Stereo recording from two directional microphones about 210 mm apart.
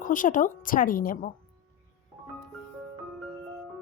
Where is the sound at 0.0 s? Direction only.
40° left (ahead or behind).